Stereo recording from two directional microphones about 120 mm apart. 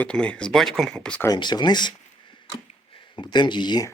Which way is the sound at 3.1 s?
40° left (ahead or behind).